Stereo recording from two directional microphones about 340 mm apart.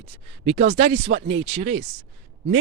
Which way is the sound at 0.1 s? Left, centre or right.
Centre.